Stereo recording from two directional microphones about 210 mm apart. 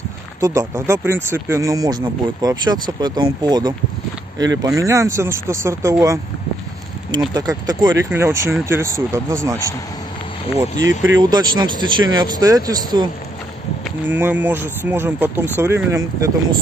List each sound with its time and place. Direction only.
0.4 s speech: 15° right (ahead or behind)
7.3 s speech: 20° right (ahead or behind)
10.8 s speech: 60° right (ahead or behind)
11.1 s speech: 20° right (ahead or behind)